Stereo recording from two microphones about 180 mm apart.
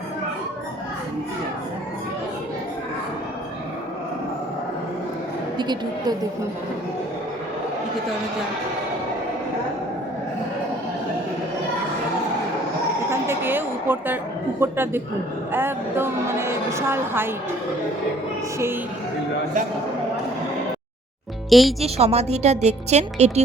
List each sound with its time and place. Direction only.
5.5 s speech: 25° right (ahead or behind)
13.1 s a sound: 15° right (ahead or behind)
14.6 s a woman's voice: 10° right (ahead or behind)
21.5 s speech: centre (ahead or behind)
21.8 s a woman's voice: 35° right (ahead or behind)